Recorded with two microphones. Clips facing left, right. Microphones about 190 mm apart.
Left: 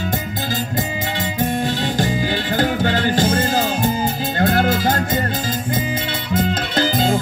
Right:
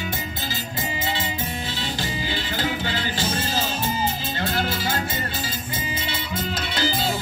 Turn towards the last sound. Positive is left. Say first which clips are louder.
# left 7 dB
turn(degrees=50)  # may be behind; listen again after turning